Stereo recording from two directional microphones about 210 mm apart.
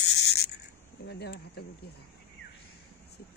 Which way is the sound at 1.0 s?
50° left (ahead or behind).